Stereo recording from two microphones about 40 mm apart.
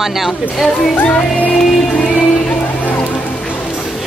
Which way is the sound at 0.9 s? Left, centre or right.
Left.